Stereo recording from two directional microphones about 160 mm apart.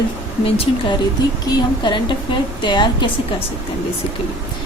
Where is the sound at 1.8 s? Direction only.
30° left (ahead or behind).